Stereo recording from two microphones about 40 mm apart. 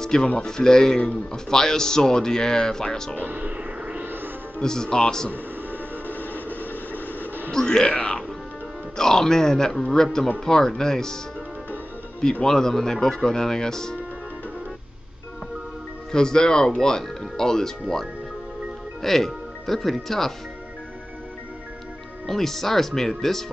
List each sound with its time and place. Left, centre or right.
0.0 s music: centre
0.4 s a man's voice: centre
3.2 s speech: right
4.0 s music: right
4.6 s a man's voice: centre
6.0 s a sound: left
7.5 s a man's voice: centre
8.9 s a man's voice: centre
12.4 s a man's voice: centre
16.1 s a man's voice: centre
19.0 s speech: centre
22.2 s a man's voice: centre